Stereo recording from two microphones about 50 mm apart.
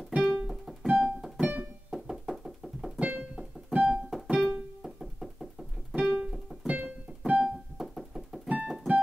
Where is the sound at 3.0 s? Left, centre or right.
Right.